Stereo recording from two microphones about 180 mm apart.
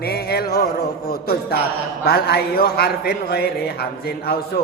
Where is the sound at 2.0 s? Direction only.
60° left (ahead or behind).